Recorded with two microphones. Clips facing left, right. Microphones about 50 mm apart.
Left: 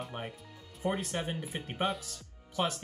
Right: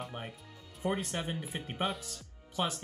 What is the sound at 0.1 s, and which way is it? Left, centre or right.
Speech, left.